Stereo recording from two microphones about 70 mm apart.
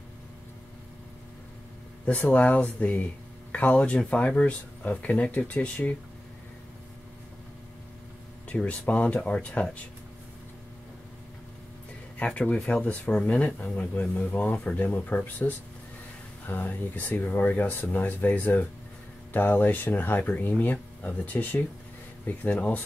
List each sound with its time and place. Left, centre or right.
2.0 s speech: left
8.5 s speech: left
12.2 s speech: centre
12.8 s speech: centre